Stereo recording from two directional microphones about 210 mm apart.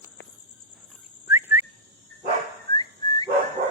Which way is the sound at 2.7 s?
20° left (ahead or behind).